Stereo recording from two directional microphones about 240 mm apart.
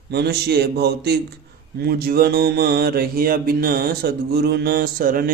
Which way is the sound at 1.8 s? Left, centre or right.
Right.